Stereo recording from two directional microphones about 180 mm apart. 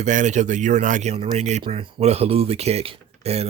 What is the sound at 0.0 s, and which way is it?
Speech, 45° right (ahead or behind).